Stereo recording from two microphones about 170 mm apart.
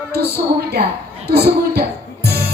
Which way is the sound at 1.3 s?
70° right (ahead or behind).